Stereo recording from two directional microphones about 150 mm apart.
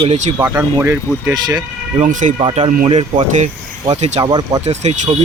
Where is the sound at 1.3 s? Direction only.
25° right (ahead or behind).